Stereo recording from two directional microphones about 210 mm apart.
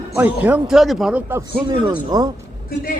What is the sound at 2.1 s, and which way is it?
Speech, 15° right (ahead or behind).